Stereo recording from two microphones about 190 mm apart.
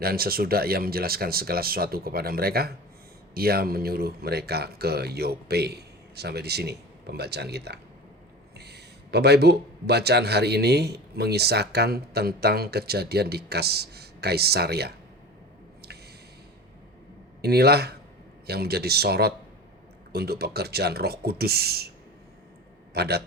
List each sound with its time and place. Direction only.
0.0 s a man's voice: 55° right (ahead or behind)
17.4 s a man's voice: 55° right (ahead or behind)
23.0 s a man's voice: 55° right (ahead or behind)